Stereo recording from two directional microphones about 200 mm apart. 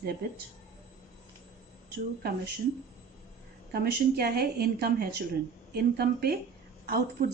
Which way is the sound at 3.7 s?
50° right (ahead or behind).